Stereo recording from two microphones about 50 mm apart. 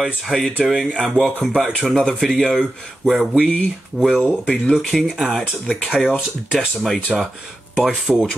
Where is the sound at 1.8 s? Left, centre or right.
Centre.